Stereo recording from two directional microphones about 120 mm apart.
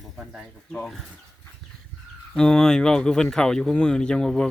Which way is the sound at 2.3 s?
5° left (ahead or behind).